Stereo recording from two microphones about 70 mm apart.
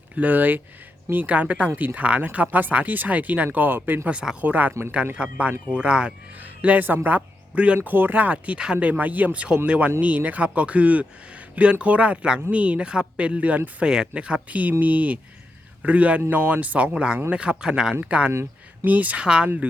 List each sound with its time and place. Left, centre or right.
0.2 s speech: right
4.1 s speech: centre
4.4 s a man's voice: right
18.3 s a sound: right
18.9 s speech: right